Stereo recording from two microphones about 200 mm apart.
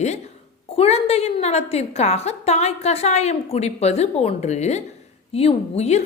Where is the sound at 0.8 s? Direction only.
30° left (ahead or behind).